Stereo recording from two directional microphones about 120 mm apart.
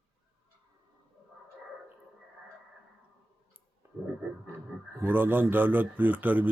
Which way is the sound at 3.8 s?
20° right (ahead or behind).